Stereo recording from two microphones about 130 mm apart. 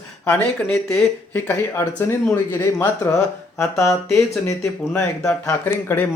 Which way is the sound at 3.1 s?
5° left (ahead or behind).